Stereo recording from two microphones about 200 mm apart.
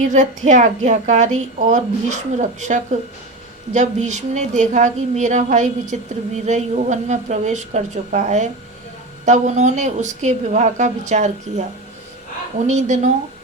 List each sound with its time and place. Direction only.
0.0 s a woman's voice: 40° right (ahead or behind)
12.6 s a woman's voice: 35° right (ahead or behind)